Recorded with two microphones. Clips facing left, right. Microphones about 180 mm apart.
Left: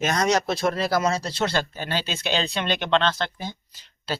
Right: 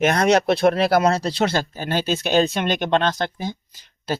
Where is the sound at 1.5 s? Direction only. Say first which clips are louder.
Right 3 dB; 45° right (ahead or behind).